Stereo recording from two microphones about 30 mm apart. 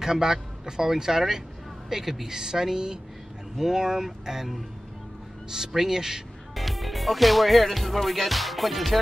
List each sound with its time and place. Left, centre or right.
0.0 s speech: centre
6.5 s speech: centre